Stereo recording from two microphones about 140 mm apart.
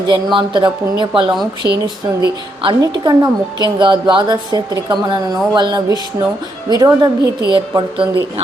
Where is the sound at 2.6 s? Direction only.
35° right (ahead or behind).